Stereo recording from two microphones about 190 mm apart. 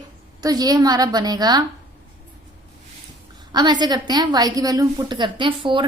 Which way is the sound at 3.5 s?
20° right (ahead or behind).